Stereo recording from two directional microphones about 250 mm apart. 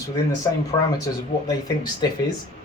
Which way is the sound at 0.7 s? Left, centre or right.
Centre.